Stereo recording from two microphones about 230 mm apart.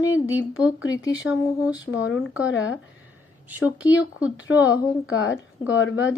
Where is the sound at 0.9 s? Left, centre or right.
Centre.